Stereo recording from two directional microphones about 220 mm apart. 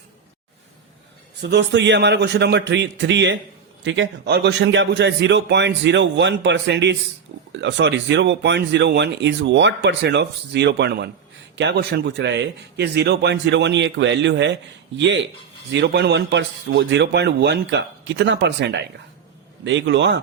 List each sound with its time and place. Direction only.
1.4 s a man's voice: 50° right (ahead or behind)